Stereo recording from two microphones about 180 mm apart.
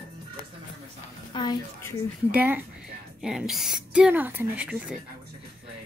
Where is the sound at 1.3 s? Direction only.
25° left (ahead or behind).